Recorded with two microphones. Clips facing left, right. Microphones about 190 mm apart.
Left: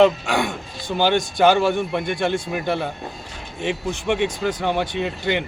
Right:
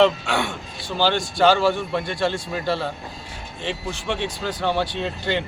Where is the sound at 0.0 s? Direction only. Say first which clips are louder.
Left 2 dB; 15° left (ahead or behind).